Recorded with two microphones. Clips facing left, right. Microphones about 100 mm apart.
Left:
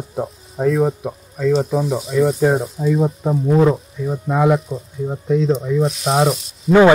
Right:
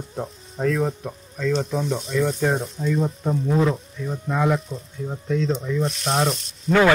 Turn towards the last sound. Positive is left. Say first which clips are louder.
# left 6 dB
turn(degrees=5)  # may be behind; listen again after turning